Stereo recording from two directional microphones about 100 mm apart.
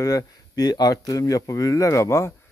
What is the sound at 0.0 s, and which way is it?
Speech, 40° left (ahead or behind).